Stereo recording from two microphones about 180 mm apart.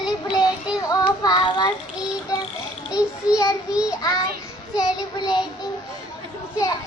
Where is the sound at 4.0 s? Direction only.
20° left (ahead or behind).